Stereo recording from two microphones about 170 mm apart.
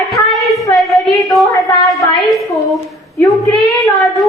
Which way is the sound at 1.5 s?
20° left (ahead or behind).